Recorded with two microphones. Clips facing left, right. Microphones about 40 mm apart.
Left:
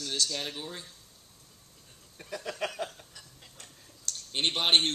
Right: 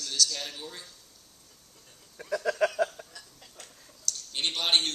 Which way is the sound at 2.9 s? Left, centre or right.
Right.